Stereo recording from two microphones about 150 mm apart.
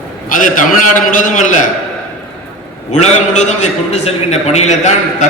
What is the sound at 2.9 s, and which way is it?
A man's voice, 50° left (ahead or behind).